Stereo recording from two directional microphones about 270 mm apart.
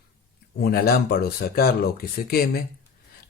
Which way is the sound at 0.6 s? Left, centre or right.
Left.